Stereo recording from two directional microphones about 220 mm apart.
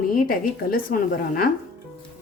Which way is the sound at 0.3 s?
40° left (ahead or behind).